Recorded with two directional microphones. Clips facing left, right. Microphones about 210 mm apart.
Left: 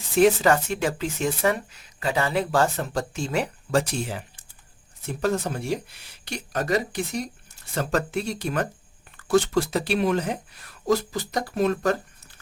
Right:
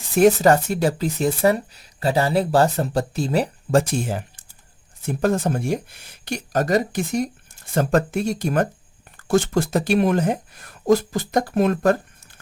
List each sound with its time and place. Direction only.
0.2 s speech: 40° right (ahead or behind)